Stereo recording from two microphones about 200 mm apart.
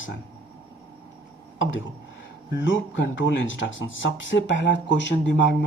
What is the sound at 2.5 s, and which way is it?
Speech, 65° left (ahead or behind).